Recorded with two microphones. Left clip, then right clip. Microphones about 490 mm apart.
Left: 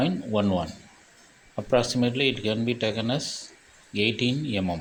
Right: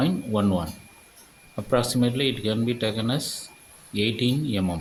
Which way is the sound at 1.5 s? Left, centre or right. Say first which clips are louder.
Even; right.